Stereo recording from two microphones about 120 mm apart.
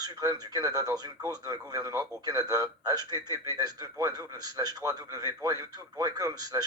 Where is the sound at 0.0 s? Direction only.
35° right (ahead or behind).